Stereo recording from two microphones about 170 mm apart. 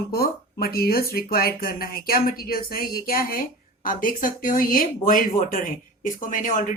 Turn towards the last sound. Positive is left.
turn(degrees=50)  # may be behind; listen again after turning